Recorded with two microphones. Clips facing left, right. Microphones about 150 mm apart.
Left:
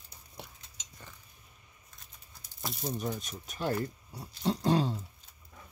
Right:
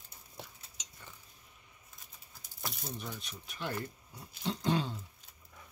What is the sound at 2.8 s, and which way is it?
Speech, 45° left (ahead or behind).